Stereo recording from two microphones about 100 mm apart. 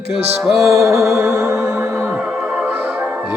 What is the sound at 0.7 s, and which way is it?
Music, 30° right (ahead or behind).